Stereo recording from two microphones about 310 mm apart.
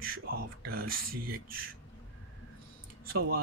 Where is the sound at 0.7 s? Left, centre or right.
Right.